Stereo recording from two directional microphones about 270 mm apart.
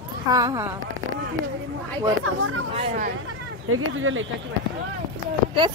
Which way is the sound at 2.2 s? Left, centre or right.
Right.